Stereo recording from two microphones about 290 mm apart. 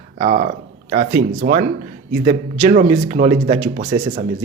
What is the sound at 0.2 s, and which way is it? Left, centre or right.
Speech, right.